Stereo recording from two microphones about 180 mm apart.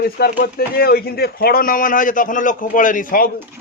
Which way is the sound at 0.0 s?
60° left (ahead or behind).